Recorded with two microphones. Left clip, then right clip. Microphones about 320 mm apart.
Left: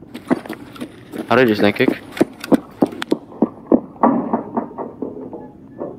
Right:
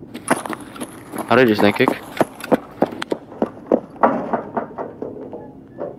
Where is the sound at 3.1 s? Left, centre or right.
Right.